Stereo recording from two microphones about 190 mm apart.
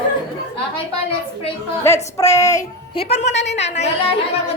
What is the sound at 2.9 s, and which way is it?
A woman's voice, 35° left (ahead or behind).